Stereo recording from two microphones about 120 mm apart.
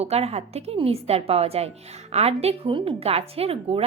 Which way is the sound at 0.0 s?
60° right (ahead or behind).